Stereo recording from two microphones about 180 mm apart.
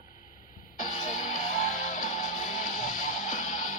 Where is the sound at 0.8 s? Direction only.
45° left (ahead or behind).